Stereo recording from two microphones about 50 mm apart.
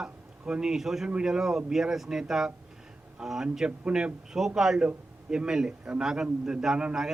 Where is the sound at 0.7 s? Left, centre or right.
Centre.